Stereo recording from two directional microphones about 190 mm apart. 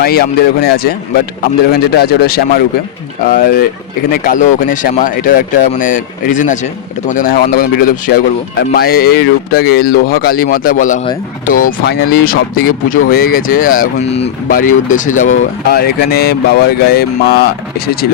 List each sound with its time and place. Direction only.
0.0 s speech: 55° left (ahead or behind)
14.0 s speech: 35° left (ahead or behind)
14.5 s speech: 45° left (ahead or behind)